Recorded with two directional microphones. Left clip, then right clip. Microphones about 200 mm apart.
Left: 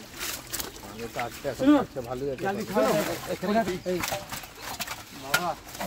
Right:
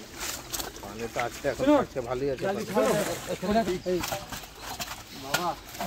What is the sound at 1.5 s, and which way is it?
Speech, 50° right (ahead or behind).